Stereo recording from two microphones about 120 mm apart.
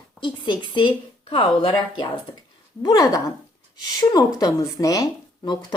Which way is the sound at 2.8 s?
30° left (ahead or behind).